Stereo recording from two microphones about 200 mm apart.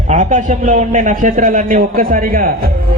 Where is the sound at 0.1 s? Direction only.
40° right (ahead or behind).